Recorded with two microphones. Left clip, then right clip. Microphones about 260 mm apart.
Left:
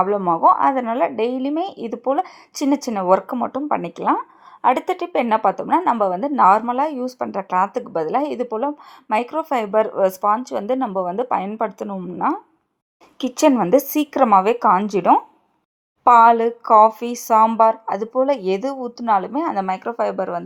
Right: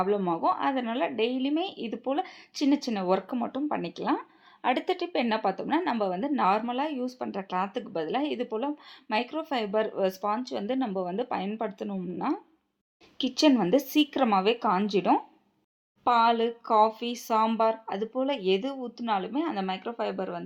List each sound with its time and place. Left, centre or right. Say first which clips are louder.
0.0 s speech: left 11 dB; centre
7.3 s speech: left 12 dB; centre
7.7 s speech: left 10 dB; left